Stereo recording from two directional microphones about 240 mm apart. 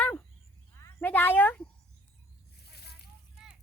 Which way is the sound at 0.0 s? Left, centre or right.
Centre.